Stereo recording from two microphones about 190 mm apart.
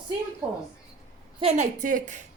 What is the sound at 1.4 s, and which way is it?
Speech, 35° right (ahead or behind).